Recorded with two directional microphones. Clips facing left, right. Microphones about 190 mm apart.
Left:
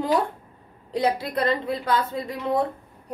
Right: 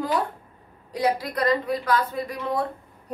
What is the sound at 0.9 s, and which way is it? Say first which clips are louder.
A woman's voice: left 1 dB; 25° left (ahead or behind).